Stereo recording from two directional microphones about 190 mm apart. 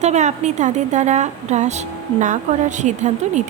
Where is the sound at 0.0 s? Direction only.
40° right (ahead or behind).